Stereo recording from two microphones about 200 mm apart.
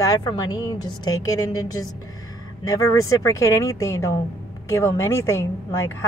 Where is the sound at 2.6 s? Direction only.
15° left (ahead or behind).